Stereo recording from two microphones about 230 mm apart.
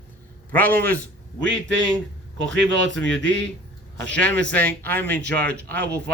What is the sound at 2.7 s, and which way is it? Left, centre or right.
Speech, right.